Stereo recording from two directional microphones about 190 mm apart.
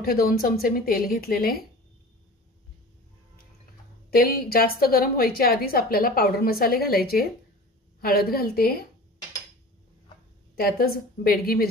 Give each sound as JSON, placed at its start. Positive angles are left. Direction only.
{"t": 0.0, "sound": "a woman's voice", "side_deg": 50}
{"t": 4.1, "sound": "a woman's voice", "side_deg": 50}
{"t": 10.6, "sound": "a woman's voice", "side_deg": 50}